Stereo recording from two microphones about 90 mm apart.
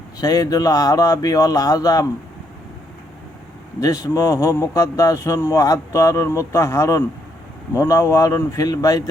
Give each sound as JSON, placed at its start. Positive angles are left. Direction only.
{"t": 0.2, "sound": "speech", "side_deg": 45}
{"t": 3.8, "sound": "speech", "side_deg": 40}